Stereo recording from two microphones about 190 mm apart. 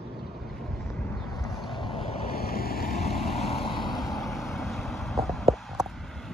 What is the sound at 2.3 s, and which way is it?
Waves, 50° left (ahead or behind).